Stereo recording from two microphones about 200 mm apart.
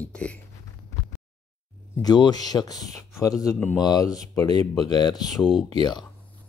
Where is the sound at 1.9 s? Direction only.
20° left (ahead or behind).